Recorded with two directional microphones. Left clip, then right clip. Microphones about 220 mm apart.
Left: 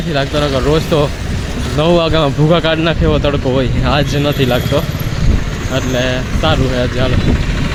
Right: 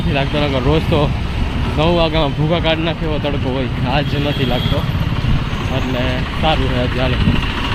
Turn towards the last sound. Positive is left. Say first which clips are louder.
# left 2 dB
turn(degrees=15)  # may be behind; listen again after turning